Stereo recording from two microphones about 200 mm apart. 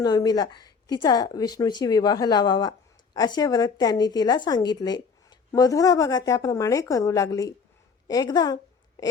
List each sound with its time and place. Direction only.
0.0 s speech: 20° left (ahead or behind)